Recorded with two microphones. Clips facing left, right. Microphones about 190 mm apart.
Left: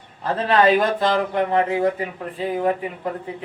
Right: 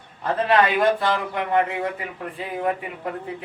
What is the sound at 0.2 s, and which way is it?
A man's voice, 35° left (ahead or behind).